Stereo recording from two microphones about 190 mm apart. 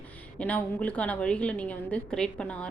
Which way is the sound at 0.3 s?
5° left (ahead or behind).